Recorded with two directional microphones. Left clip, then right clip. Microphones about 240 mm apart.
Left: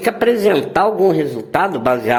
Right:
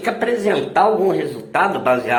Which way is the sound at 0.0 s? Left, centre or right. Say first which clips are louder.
Left 5 dB; left.